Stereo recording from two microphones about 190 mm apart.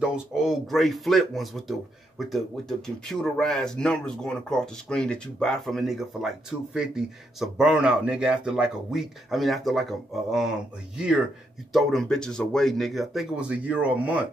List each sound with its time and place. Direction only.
0.0 s speech: 5° right (ahead or behind)
11.7 s speech: centre (ahead or behind)